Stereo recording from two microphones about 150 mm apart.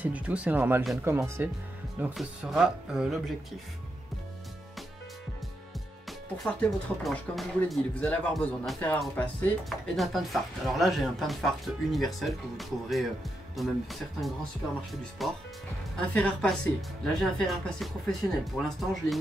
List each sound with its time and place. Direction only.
0.0 s speech: 10° right (ahead or behind)
2.1 s speech: 5° right (ahead or behind)
6.0 s speech: centre (ahead or behind)